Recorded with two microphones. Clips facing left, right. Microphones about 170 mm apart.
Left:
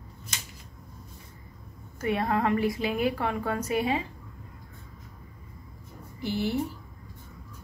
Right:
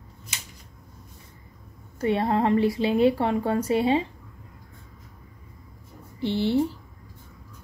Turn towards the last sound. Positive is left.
turn(degrees=-30)  # may be behind; listen again after turning